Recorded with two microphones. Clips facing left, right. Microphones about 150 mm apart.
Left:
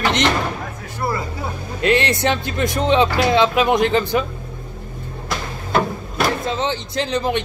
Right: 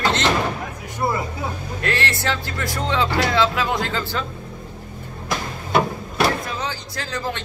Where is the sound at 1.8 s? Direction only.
20° left (ahead or behind).